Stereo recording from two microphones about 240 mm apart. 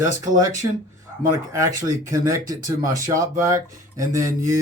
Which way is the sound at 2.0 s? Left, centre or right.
Centre.